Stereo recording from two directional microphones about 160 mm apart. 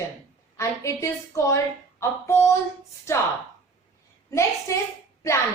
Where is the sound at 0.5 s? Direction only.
20° left (ahead or behind).